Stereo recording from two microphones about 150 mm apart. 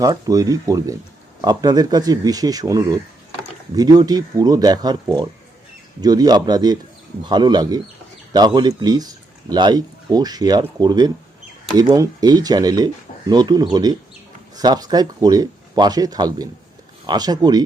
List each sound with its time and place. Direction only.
0.0 s speech: 25° right (ahead or behind)